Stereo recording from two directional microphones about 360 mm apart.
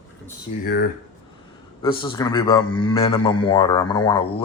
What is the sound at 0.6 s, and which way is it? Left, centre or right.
Speech, left.